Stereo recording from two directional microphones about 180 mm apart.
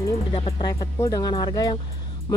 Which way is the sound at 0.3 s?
25° left (ahead or behind).